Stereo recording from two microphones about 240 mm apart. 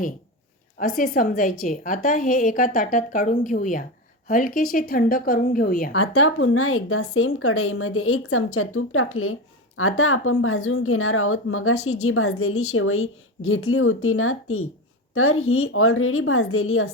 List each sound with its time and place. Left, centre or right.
0.8 s a woman's voice: left
6.0 s speech: left